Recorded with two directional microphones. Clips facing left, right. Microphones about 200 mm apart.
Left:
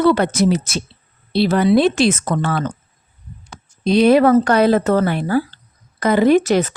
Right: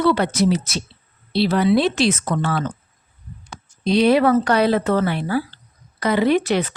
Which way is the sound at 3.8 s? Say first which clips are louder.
Left 3 dB; 50° left (ahead or behind).